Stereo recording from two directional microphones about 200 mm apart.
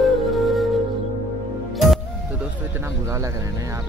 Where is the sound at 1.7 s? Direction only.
Centre (ahead or behind).